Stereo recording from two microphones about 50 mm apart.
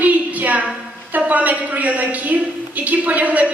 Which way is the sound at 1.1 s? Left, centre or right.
Right.